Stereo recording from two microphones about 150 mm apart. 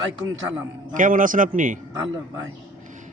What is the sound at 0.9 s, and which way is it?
Speech, 60° right (ahead or behind).